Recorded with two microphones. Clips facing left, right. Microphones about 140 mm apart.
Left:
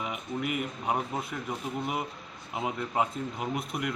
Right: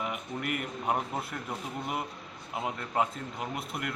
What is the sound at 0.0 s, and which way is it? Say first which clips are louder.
A man's voice: left 2 dB; centre (ahead or behind).